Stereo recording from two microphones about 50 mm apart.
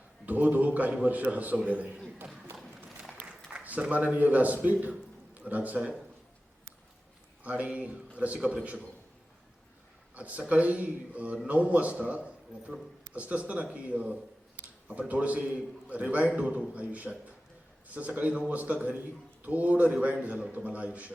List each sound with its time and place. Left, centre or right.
0.3 s a man's voice: right
2.5 s clip-clop: right
3.5 s a man's voice: right
7.4 s a man's voice: right
10.2 s a man's voice: right